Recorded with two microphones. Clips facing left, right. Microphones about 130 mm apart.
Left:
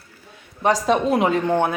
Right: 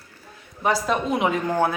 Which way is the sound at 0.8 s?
35° left (ahead or behind).